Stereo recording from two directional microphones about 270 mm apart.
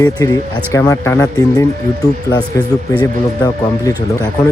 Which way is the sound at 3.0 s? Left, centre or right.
Centre.